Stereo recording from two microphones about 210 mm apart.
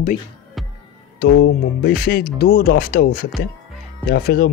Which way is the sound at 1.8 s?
45° left (ahead or behind).